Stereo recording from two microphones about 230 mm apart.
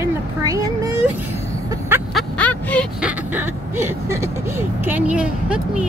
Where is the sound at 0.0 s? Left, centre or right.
Centre.